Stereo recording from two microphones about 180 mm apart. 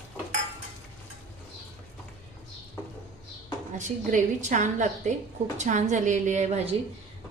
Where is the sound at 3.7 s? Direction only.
45° right (ahead or behind).